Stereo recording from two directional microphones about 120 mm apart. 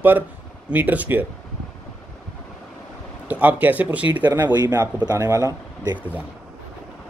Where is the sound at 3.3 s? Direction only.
15° right (ahead or behind).